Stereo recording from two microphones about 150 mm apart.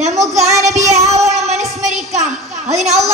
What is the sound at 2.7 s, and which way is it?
Child singing, 50° right (ahead or behind).